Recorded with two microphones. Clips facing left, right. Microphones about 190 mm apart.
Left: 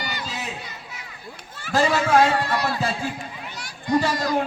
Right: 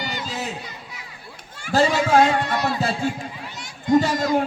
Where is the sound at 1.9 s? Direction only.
20° right (ahead or behind).